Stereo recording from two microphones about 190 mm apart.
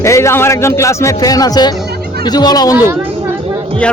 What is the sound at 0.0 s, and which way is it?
A man's voice, 15° left (ahead or behind).